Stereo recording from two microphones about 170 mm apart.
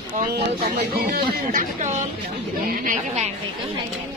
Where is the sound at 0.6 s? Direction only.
60° right (ahead or behind).